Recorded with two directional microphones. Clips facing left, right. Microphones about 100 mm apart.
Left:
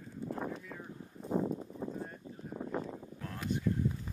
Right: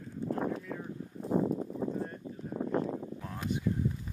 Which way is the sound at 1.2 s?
90° right.